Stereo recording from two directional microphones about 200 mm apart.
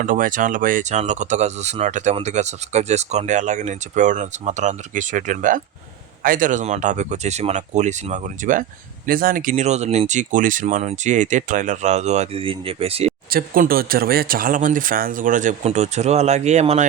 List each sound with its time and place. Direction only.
0.0 s speech: 40° right (ahead or behind)
13.3 s speech: 45° right (ahead or behind)